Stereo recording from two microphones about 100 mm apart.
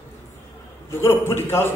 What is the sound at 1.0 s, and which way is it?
Speech, 25° left (ahead or behind).